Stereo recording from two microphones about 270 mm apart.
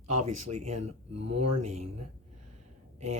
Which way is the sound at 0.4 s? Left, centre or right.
Right.